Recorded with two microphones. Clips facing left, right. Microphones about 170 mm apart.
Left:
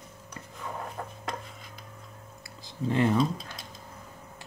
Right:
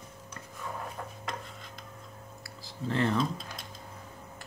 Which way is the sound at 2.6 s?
15° left (ahead or behind).